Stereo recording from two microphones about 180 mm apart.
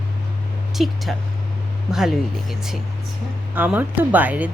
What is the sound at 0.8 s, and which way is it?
A woman's voice, centre (ahead or behind).